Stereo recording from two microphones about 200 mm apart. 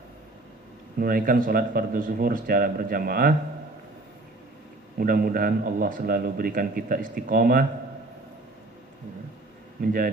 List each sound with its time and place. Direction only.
0.9 s a man's voice: 45° right (ahead or behind)
4.9 s a man's voice: 45° right (ahead or behind)
9.8 s a man's voice: 45° right (ahead or behind)